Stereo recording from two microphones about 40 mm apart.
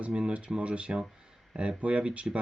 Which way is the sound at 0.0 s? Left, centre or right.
Right.